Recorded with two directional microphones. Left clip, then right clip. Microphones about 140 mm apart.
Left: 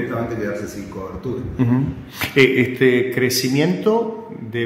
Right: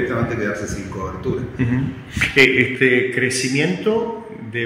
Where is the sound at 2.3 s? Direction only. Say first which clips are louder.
Right 1 dB; 30° left (ahead or behind).